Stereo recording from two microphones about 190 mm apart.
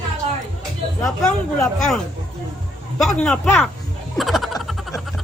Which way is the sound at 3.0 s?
5° left (ahead or behind).